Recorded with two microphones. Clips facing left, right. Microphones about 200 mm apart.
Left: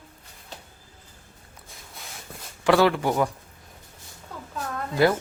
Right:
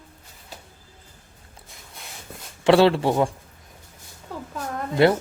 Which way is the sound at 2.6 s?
25° right (ahead or behind).